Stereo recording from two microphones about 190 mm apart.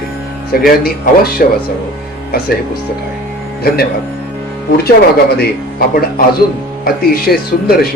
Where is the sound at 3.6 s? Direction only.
55° left (ahead or behind).